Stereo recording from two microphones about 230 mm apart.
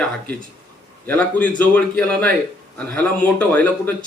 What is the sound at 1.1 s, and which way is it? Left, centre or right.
Speech, centre.